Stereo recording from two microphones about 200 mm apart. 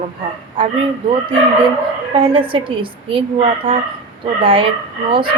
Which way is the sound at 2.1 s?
25° right (ahead or behind).